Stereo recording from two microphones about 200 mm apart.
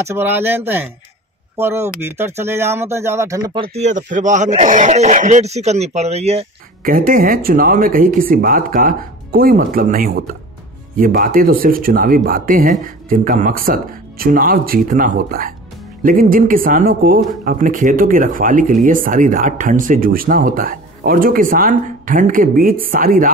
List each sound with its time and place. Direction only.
0.0 s speech: 10° right (ahead or behind)
3.7 s speech: 35° right (ahead or behind)
6.8 s speech: 45° right (ahead or behind)